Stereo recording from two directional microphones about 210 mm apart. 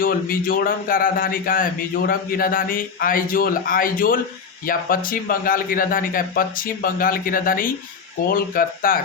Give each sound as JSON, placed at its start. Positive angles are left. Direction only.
{"t": 0.0, "sound": "speech", "side_deg": 45}